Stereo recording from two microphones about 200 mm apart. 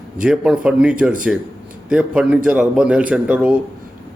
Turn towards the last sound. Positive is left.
turn(degrees=-5)  # may be behind; listen again after turning